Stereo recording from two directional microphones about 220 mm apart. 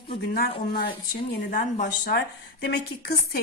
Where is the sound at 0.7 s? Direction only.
45° left (ahead or behind).